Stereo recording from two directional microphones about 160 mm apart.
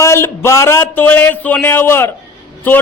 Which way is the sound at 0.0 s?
15° left (ahead or behind).